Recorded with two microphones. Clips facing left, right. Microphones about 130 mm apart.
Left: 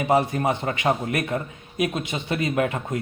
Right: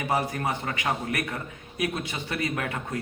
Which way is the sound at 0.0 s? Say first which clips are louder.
Left 6 dB; 25° left (ahead or behind).